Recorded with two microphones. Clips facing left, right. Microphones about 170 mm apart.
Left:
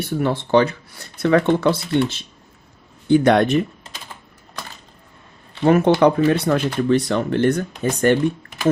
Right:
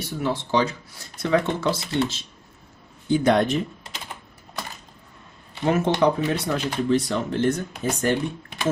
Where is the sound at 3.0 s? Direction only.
65° left (ahead or behind).